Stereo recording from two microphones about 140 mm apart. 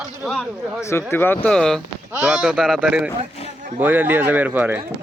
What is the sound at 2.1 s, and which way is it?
Speech, 5° right (ahead or behind).